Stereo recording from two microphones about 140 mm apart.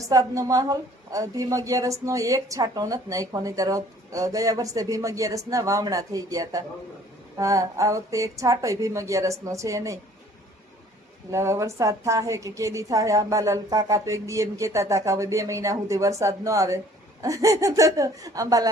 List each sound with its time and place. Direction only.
0.0 s a woman's voice: 25° right (ahead or behind)
11.3 s a woman's voice: 20° right (ahead or behind)